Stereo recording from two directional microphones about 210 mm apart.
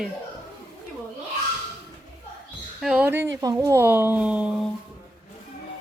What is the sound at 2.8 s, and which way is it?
Speech, 5° right (ahead or behind).